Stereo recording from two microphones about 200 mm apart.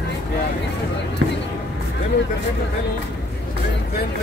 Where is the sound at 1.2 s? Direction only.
70° right (ahead or behind).